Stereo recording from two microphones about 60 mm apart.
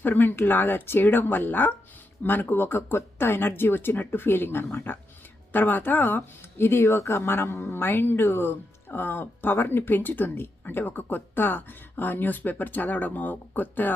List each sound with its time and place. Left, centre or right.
0.0 s speech: left
6.8 s speech: left